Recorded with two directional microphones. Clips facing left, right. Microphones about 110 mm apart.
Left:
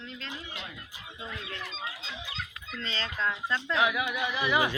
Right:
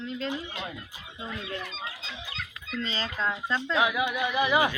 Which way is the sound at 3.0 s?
35° right (ahead or behind).